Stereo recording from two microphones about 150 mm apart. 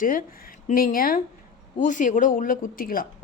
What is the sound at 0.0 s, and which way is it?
Speech, 65° left (ahead or behind).